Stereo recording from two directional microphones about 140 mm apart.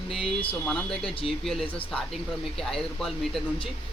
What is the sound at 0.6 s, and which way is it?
Speech, 10° left (ahead or behind).